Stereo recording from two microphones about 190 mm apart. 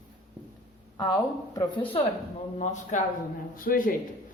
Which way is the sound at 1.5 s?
15° left (ahead or behind).